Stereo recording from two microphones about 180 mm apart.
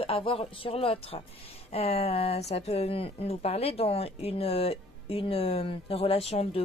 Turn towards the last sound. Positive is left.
turn(degrees=35)  # may be behind; listen again after turning